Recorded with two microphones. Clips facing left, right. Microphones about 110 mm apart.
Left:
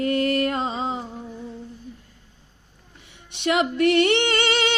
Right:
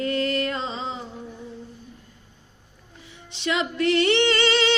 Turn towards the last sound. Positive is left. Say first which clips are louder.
# right 1 dB
turn(degrees=55)  # may be behind; listen again after turning